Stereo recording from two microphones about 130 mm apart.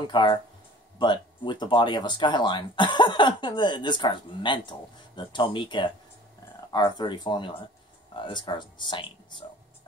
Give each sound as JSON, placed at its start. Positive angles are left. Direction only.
{"t": 0.0, "sound": "speech", "side_deg": 35}